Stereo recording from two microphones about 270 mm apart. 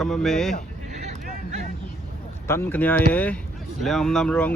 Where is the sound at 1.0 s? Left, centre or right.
Right.